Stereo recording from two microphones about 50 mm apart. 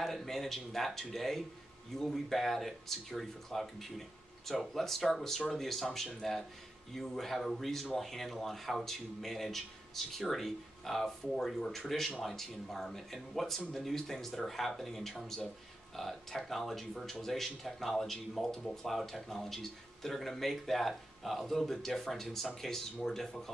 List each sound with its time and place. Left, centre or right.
0.0 s speech: centre